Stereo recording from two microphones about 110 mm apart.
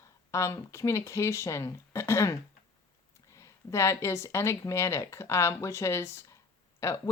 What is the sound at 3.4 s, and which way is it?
Speech, 25° left (ahead or behind).